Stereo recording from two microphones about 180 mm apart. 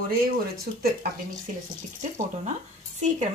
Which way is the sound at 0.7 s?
50° right (ahead or behind).